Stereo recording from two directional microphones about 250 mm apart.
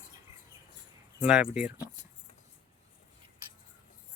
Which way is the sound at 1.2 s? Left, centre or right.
Centre.